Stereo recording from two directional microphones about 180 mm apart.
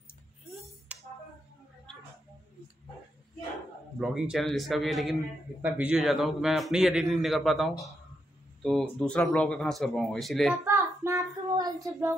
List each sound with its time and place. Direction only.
0.9 s music: 10° right (ahead or behind)
4.0 s a man's voice: 5° right (ahead or behind)
10.6 s child singing: 15° right (ahead or behind)